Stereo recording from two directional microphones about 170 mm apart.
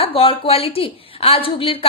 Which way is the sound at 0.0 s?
35° left (ahead or behind).